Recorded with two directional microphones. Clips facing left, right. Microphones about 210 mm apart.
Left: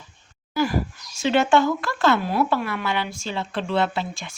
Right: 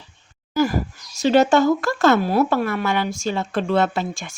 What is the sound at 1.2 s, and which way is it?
Speech, 40° right (ahead or behind).